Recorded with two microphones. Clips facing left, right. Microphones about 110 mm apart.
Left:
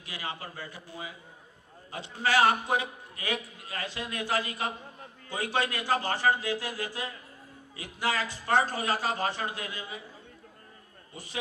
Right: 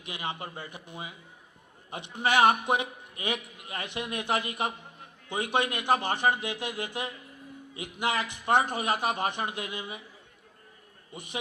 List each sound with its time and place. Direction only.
0.0 s a man's voice: 20° right (ahead or behind)
11.1 s a man's voice: 20° right (ahead or behind)